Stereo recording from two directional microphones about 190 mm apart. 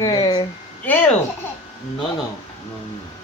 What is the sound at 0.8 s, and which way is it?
Speech, 10° left (ahead or behind).